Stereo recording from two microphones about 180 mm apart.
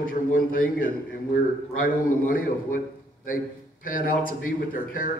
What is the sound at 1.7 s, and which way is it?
Speech, 50° left (ahead or behind).